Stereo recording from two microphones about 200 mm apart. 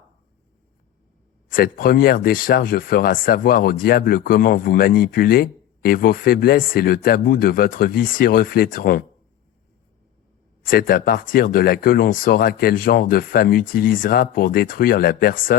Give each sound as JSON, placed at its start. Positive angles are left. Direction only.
{"t": 1.5, "sound": "speech", "side_deg": 45}
{"t": 10.7, "sound": "speech", "side_deg": 45}